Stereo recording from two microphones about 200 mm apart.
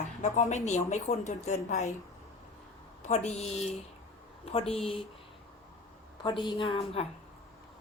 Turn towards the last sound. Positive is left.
turn(degrees=30)  # may be behind; listen again after turning